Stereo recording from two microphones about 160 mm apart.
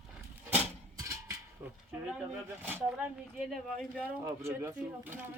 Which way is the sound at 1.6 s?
15° right (ahead or behind).